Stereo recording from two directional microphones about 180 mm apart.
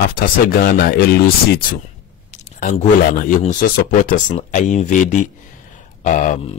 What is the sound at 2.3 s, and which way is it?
Speech, 40° left (ahead or behind).